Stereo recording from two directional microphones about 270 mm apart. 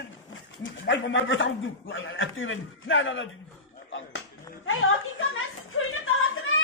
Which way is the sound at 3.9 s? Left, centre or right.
Left.